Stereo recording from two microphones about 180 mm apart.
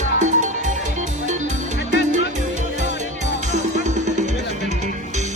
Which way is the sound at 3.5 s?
40° right (ahead or behind).